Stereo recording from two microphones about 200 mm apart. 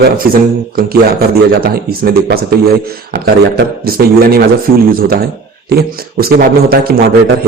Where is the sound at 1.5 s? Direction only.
50° right (ahead or behind).